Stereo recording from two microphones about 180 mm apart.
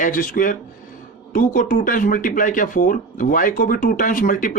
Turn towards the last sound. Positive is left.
turn(degrees=50)  # may be behind; listen again after turning